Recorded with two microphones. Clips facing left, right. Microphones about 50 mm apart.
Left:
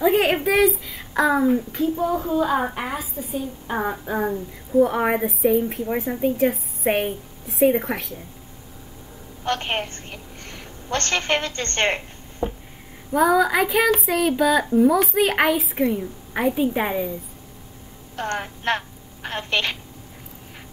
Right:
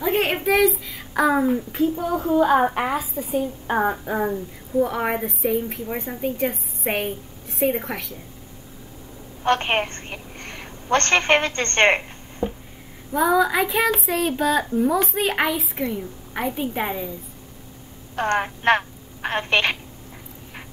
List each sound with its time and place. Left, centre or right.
0.0 s a woman's voice: centre
0.7 s child singing: centre
1.2 s a child's voice: centre
2.0 s a child's voice: right
4.2 s a woman's voice: centre
9.4 s a woman's voice: right
12.4 s a sound: centre
13.1 s a woman's voice: centre
18.1 s a woman's voice: right